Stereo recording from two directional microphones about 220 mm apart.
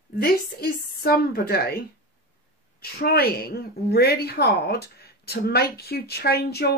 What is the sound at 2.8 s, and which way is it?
A woman's voice, 45° left (ahead or behind).